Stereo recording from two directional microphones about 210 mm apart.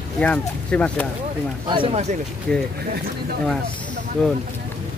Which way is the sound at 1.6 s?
25° right (ahead or behind).